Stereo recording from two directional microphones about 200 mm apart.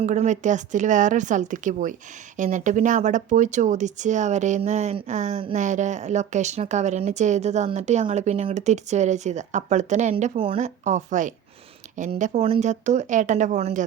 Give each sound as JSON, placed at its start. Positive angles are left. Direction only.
{"t": 0.0, "sound": "a woman's voice", "side_deg": -35}